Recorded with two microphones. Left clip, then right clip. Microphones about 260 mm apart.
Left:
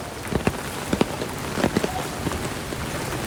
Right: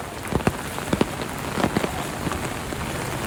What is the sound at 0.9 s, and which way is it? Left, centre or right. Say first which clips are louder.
Rain: even; right.